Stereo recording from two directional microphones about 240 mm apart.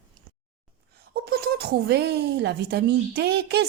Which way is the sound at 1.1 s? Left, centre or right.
Right.